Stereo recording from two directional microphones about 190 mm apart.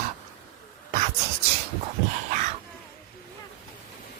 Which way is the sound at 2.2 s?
40° right (ahead or behind).